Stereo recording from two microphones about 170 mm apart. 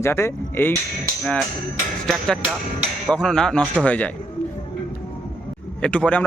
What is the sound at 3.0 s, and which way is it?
Speech, 5° left (ahead or behind).